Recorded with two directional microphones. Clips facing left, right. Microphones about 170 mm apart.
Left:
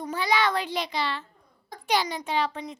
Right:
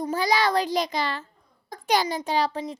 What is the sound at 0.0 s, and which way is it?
A child's voice, 40° right (ahead or behind).